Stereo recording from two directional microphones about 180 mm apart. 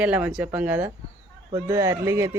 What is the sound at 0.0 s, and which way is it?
Speech, 10° right (ahead or behind).